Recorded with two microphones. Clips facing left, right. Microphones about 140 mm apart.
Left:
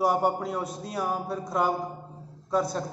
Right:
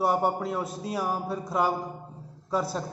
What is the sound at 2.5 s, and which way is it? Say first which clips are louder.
Speech: left 2 dB; 5° right (ahead or behind).